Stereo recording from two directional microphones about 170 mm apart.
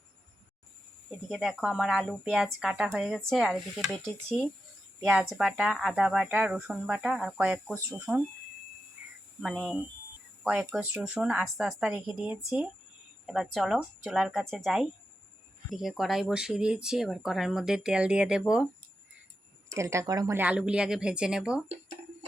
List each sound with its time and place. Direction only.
1.3 s speech: centre (ahead or behind)
9.4 s speech: centre (ahead or behind)
19.7 s a woman's voice: 15° right (ahead or behind)
20.4 s speech: 5° right (ahead or behind)